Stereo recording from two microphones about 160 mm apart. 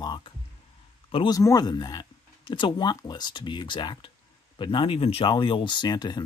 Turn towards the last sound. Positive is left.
turn(degrees=25)  # may be behind; listen again after turning